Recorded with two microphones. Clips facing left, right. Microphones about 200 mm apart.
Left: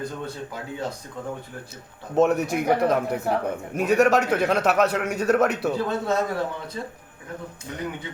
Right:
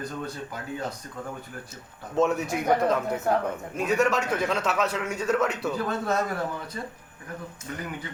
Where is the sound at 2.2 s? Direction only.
65° left (ahead or behind).